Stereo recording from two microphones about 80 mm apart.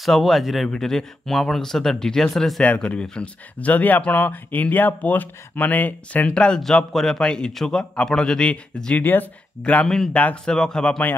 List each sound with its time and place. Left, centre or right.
0.0 s speech: centre
2.6 s speech: centre
9.0 s speech: left
9.8 s speech: centre
10.1 s speech: centre